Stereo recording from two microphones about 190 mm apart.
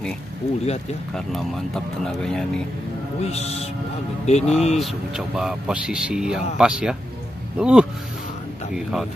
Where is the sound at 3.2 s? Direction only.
35° left (ahead or behind).